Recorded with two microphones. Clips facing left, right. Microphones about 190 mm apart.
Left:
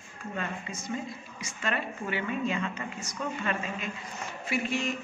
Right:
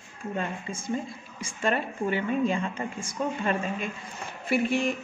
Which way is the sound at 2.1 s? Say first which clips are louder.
Right 4 dB; 45° right (ahead or behind).